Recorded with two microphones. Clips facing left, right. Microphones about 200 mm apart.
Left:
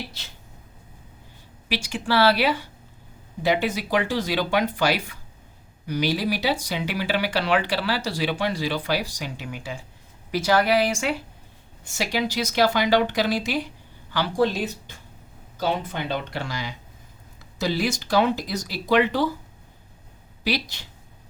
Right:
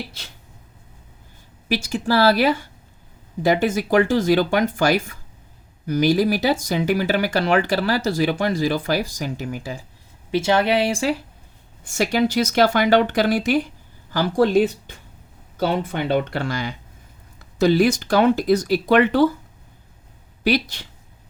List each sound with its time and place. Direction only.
1.7 s speech: 40° right (ahead or behind)
10.3 s speech: 25° right (ahead or behind)
11.9 s speech: 50° right (ahead or behind)
20.4 s speech: 55° right (ahead or behind)